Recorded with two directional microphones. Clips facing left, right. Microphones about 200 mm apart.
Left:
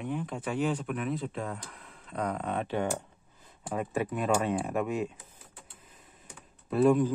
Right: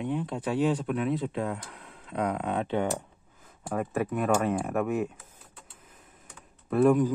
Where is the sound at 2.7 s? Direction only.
20° right (ahead or behind).